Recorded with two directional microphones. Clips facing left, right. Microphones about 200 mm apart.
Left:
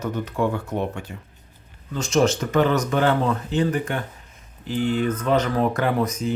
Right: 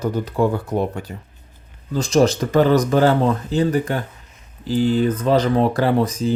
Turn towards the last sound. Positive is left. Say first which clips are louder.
# right 4 dB
turn(degrees=-30)  # may be behind; listen again after turning